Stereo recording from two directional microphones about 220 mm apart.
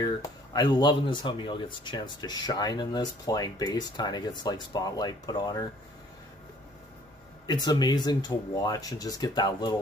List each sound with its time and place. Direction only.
0.0 s speech: 20° left (ahead or behind)
7.4 s speech: 20° left (ahead or behind)